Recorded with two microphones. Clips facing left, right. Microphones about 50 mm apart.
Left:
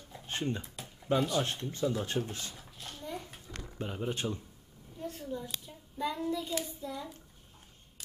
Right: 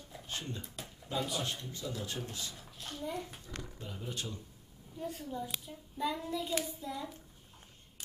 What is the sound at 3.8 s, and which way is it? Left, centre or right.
Speech, left.